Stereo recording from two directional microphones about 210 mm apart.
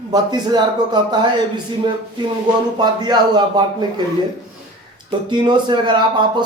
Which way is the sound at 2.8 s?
20° right (ahead or behind).